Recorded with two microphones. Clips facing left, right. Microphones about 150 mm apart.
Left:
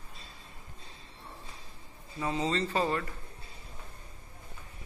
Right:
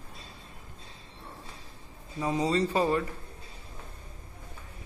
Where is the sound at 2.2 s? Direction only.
15° right (ahead or behind).